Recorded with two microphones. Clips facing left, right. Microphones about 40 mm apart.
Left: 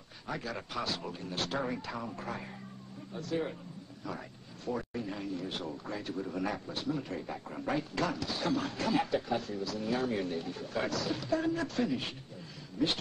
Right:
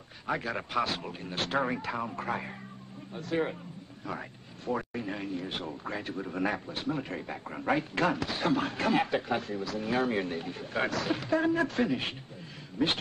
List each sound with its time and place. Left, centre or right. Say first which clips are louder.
0.3 s speech: right 6 dB; right